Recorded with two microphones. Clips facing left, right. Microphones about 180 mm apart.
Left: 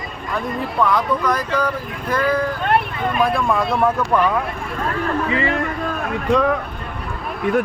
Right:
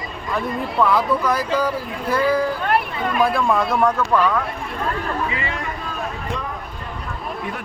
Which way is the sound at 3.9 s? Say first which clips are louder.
Left 1 dB; 15° left (ahead or behind).